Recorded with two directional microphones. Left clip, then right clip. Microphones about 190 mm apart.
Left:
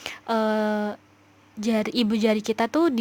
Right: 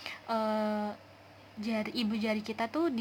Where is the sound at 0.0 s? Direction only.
40° left (ahead or behind).